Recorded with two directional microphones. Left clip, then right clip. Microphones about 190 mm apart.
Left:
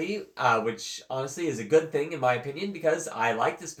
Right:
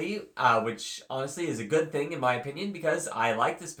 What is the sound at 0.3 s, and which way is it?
Speech, 20° right (ahead or behind).